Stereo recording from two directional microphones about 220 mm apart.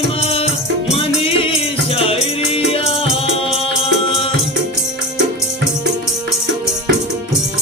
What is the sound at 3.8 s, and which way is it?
Music, 25° left (ahead or behind).